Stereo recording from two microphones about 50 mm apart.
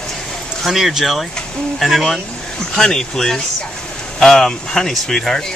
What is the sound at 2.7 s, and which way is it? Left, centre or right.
Speech, centre.